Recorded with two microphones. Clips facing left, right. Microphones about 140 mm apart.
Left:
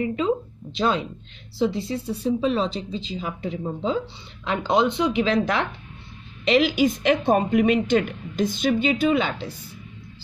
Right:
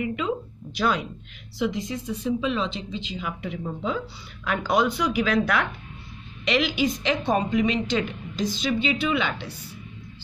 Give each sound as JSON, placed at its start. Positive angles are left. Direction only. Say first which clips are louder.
{"t": 0.0, "sound": "speech", "louder": "left 4 dB", "side_deg": 30}
{"t": 6.6, "sound": "a woman's voice", "louder": "left 4 dB", "side_deg": 45}